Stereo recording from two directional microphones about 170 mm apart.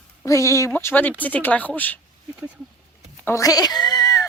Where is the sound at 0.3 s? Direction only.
20° left (ahead or behind).